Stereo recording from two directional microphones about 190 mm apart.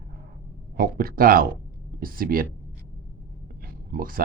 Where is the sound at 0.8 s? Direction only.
50° right (ahead or behind).